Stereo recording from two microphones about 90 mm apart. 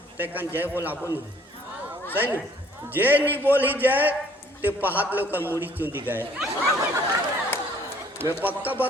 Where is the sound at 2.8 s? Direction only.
20° right (ahead or behind).